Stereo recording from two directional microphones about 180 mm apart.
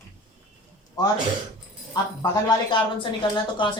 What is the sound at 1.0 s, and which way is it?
Speech, 20° left (ahead or behind).